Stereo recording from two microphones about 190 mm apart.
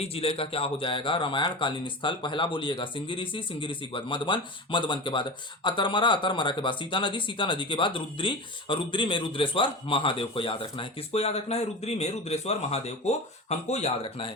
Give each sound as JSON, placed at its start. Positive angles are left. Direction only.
{"t": 0.0, "sound": "speech", "side_deg": 30}